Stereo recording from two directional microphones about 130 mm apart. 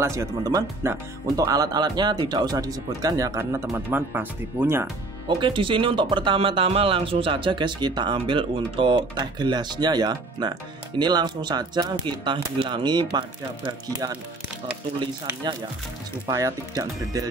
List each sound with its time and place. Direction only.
0.0 s speech: 20° right (ahead or behind)
5.4 s speech: 40° right (ahead or behind)
16.3 s speech: 25° right (ahead or behind)